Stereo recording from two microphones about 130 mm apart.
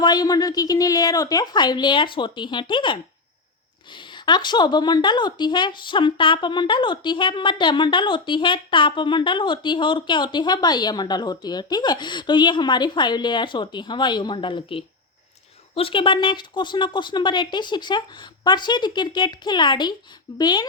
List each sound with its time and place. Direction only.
0.0 s a woman's voice: 30° left (ahead or behind)